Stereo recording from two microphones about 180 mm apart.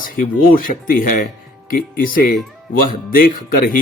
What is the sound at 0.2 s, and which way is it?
Speech, 50° left (ahead or behind).